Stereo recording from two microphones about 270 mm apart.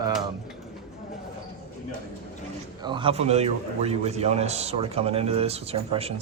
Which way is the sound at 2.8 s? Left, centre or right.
Centre.